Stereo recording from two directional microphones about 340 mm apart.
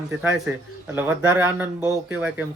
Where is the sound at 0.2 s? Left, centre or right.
Centre.